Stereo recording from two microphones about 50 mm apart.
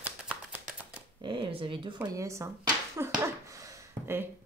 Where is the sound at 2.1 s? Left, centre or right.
Right.